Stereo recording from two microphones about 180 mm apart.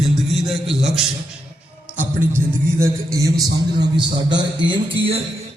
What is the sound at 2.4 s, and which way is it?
A man's voice, 15° right (ahead or behind).